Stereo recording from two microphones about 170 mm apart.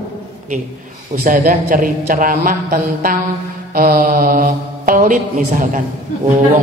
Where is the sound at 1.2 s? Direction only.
55° right (ahead or behind).